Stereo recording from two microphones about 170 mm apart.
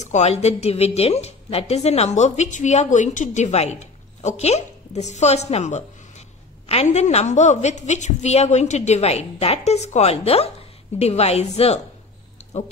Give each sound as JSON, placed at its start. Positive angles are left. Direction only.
{"t": 0.0, "sound": "a woman's voice", "side_deg": 40}